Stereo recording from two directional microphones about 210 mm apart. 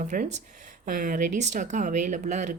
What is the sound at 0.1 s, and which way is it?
Speech, 40° right (ahead or behind).